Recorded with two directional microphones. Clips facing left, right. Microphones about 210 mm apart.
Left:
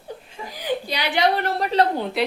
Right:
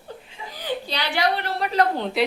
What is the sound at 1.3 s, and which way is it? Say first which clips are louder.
Speech: left 3 dB; 45° left (ahead or behind).